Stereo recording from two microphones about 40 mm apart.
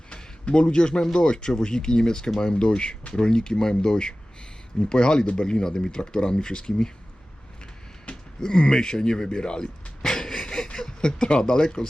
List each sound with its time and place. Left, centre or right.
0.5 s speech: left
8.4 s speech: left
10.0 s a sound: centre